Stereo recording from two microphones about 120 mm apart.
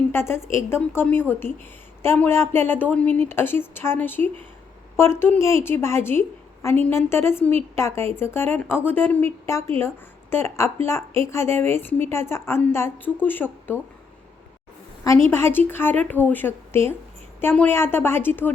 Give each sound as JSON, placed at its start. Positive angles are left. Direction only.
{"t": 0.1, "sound": "a woman's voice", "side_deg": 20}
{"t": 15.0, "sound": "a woman's voice", "side_deg": 20}